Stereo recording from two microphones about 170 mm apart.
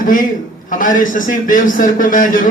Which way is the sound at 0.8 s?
50° left (ahead or behind).